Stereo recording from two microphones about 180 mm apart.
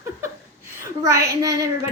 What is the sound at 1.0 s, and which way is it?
Speech, 15° right (ahead or behind).